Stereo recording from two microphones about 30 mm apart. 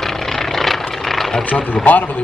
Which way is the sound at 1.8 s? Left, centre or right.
Left.